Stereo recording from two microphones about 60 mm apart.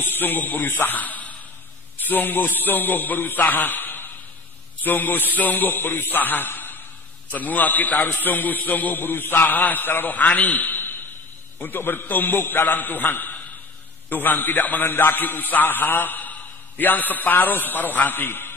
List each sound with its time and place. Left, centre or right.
0.0 s a man's voice: left